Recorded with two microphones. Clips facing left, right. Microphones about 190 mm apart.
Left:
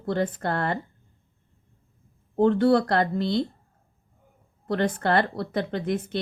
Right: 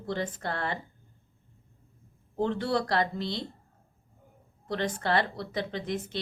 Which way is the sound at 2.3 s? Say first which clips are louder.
Left 9 dB; 55° left (ahead or behind).